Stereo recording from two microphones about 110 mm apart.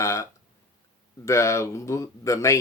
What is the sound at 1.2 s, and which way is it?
Speech, 25° left (ahead or behind).